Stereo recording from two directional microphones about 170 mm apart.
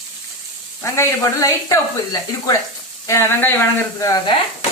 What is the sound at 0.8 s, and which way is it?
Speech, 15° left (ahead or behind).